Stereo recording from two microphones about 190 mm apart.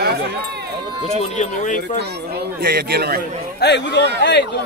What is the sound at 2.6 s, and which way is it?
Speech, 55° right (ahead or behind).